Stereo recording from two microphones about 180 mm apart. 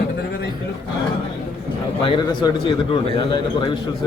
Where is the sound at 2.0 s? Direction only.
25° left (ahead or behind).